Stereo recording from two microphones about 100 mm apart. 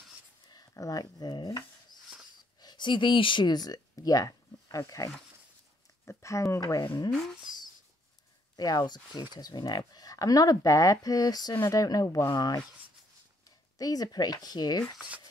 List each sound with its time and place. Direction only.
0.5 s speech: 40° left (ahead or behind)
8.5 s speech: 40° left (ahead or behind)
13.7 s speech: 40° left (ahead or behind)
15.0 s speech: 15° right (ahead or behind)